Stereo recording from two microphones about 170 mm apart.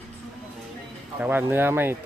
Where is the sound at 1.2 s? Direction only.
10° right (ahead or behind).